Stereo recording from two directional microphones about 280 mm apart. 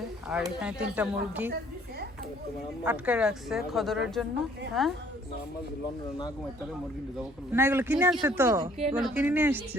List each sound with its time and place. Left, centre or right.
0.3 s a woman's voice: centre
2.8 s a woman's voice: centre
7.2 s speech: centre